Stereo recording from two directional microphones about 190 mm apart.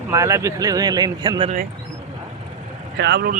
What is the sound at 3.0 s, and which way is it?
Speech, 60° right (ahead or behind).